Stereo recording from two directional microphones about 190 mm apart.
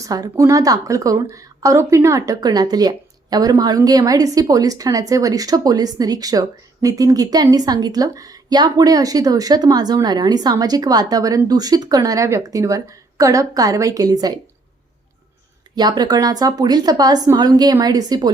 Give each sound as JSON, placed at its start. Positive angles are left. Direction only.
{"t": 0.0, "sound": "a woman's voice", "side_deg": -20}
{"t": 15.7, "sound": "a woman's voice", "side_deg": -20}